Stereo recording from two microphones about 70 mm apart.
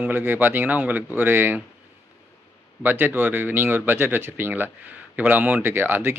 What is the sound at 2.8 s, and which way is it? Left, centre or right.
Speech, right.